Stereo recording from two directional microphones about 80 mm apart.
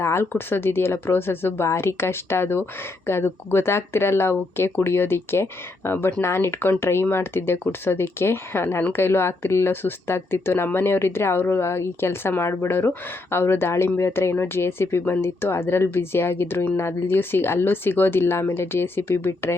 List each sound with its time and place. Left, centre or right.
0.0 s speech: left